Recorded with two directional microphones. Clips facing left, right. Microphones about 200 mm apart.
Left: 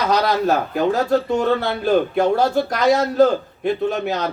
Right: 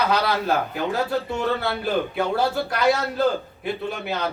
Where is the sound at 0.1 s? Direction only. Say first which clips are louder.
Left 4 dB; 40° left (ahead or behind).